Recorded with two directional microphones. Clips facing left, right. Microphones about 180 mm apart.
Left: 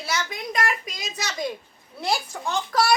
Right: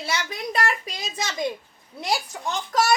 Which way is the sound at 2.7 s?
20° right (ahead or behind).